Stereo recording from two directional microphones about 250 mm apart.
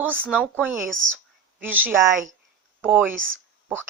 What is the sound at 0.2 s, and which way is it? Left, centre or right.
A woman's voice, centre.